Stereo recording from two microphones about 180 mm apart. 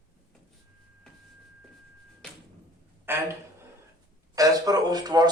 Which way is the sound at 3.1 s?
10° right (ahead or behind).